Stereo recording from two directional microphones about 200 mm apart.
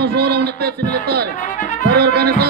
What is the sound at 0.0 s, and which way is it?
Music, 55° right (ahead or behind).